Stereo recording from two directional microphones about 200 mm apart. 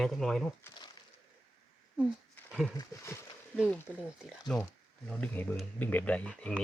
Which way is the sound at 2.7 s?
15° left (ahead or behind).